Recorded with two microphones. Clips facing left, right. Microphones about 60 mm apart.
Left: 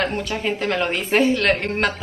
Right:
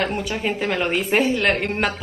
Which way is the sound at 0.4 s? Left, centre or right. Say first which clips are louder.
Left 1 dB; centre.